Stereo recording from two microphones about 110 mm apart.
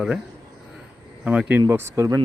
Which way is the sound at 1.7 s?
25° right (ahead or behind).